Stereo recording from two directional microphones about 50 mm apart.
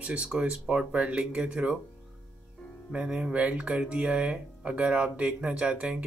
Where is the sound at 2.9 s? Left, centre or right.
Centre.